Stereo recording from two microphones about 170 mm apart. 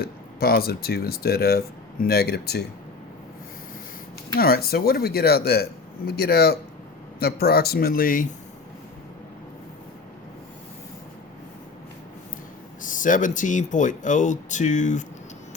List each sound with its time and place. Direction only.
0.0 s speech: 65° left (ahead or behind)
4.4 s speech: 65° left (ahead or behind)
12.8 s speech: 50° left (ahead or behind)